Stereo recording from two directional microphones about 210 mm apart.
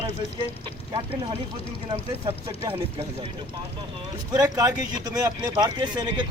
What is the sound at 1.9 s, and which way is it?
Speech, 25° right (ahead or behind).